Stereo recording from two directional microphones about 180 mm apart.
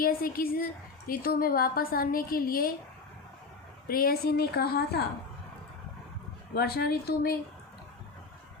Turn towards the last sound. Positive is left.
turn(degrees=60)  # may be behind; listen again after turning